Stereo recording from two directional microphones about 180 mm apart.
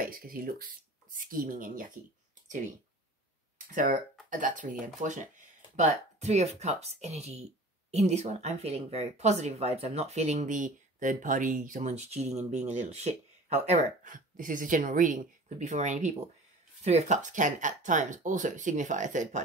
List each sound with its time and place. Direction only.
0.0 s speech: 55° right (ahead or behind)
3.5 s speech: 45° right (ahead or behind)